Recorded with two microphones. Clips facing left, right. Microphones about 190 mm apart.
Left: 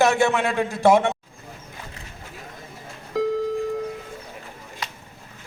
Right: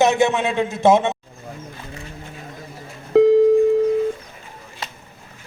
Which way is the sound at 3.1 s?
60° right (ahead or behind).